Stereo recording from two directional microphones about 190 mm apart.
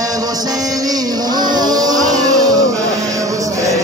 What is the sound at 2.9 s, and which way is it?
Music, 20° right (ahead or behind).